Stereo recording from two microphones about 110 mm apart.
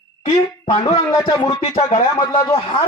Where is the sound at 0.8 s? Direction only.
45° left (ahead or behind).